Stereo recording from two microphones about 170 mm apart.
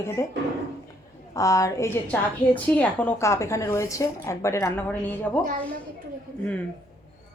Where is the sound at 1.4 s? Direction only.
20° left (ahead or behind).